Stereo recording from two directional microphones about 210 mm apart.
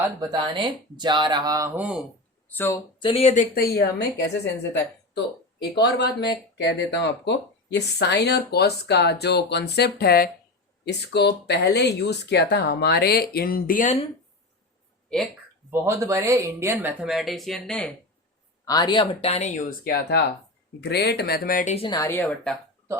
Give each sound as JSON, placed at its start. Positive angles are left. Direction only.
{"t": 0.2, "sound": "speech", "side_deg": -20}
{"t": 2.5, "sound": "a woman's voice", "side_deg": 10}
{"t": 3.0, "sound": "speech", "side_deg": 25}
{"t": 5.7, "sound": "speech", "side_deg": 55}
{"t": 15.1, "sound": "speech", "side_deg": 5}
{"t": 15.7, "sound": "speech", "side_deg": -15}
{"t": 18.6, "sound": "speech", "side_deg": 20}
{"t": 21.8, "sound": "a woman's voice", "side_deg": 15}